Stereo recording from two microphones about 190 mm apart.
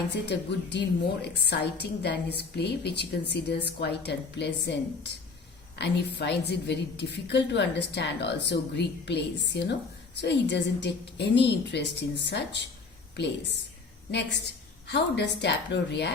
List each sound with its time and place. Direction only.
0.1 s a woman's voice: 65° left (ahead or behind)
5.7 s a woman's voice: 65° left (ahead or behind)
14.1 s a woman's voice: 65° left (ahead or behind)